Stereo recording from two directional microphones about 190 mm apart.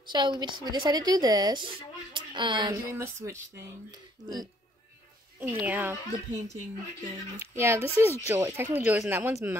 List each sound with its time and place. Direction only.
0.0 s speech: 25° right (ahead or behind)
5.4 s speech: 10° right (ahead or behind)
7.3 s speech: 15° right (ahead or behind)